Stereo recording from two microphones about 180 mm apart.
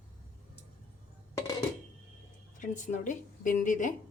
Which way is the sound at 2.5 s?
45° left (ahead or behind).